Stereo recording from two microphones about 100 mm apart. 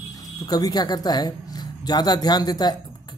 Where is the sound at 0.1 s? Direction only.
40° left (ahead or behind).